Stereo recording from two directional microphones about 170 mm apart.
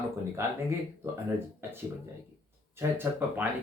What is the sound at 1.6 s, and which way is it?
Speech, 15° right (ahead or behind).